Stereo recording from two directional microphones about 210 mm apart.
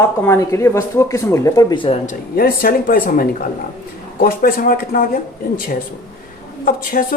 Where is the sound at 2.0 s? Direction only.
45° left (ahead or behind).